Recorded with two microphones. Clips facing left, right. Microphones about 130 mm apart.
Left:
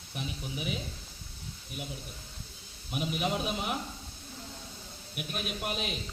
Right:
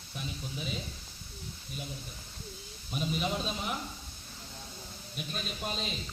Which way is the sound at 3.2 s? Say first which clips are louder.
Left 4 dB; 15° left (ahead or behind).